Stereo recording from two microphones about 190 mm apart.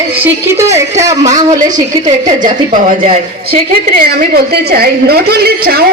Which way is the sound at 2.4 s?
40° right (ahead or behind).